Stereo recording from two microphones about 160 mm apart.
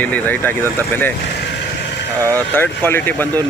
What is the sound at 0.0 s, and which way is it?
Speech, 10° left (ahead or behind).